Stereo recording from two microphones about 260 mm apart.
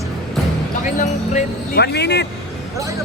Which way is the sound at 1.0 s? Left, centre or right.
Left.